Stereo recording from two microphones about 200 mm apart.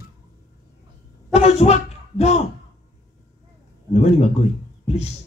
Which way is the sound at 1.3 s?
30° left (ahead or behind).